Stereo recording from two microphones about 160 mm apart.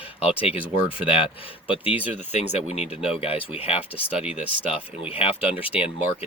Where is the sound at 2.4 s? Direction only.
45° left (ahead or behind).